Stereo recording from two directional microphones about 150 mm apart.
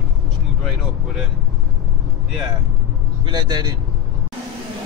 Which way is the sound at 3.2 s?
30° right (ahead or behind).